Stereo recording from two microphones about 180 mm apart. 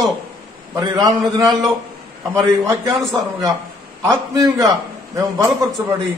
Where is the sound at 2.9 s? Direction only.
Centre (ahead or behind).